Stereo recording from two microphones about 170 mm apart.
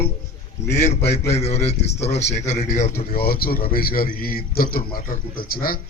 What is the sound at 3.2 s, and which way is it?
A man's voice, 65° left (ahead or behind).